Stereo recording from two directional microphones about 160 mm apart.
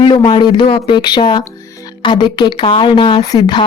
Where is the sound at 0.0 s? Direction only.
30° left (ahead or behind).